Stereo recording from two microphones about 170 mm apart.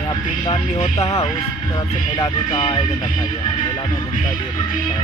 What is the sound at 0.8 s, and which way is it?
Speech, 40° left (ahead or behind).